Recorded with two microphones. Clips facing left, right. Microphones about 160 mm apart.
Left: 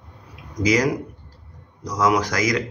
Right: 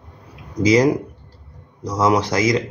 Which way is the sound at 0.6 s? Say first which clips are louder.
Right 5 dB; 30° right (ahead or behind).